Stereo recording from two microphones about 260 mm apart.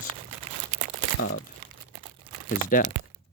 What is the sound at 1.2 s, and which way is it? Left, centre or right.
Speech, left.